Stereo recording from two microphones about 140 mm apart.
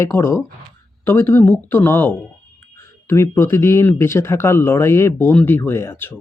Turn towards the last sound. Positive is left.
turn(degrees=15)  # may be behind; listen again after turning